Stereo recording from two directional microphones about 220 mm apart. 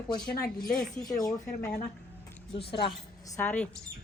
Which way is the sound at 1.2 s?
15° left (ahead or behind).